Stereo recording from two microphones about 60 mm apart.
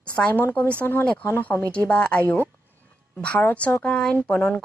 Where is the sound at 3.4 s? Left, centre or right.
Left.